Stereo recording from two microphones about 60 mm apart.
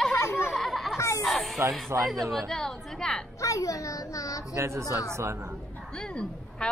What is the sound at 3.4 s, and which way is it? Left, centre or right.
A child's voice, left.